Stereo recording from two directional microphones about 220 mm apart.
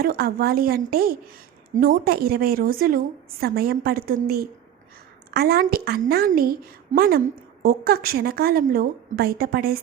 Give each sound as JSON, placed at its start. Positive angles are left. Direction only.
{"t": 0.0, "sound": "a woman's voice", "side_deg": -40}